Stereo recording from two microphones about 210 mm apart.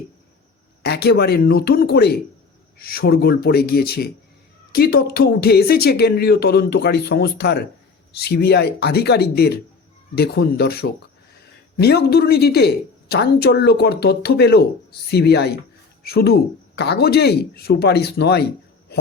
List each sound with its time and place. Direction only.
0.8 s speech: 50° left (ahead or behind)